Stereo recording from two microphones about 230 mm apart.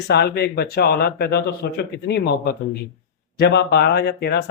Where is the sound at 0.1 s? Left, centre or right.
Left.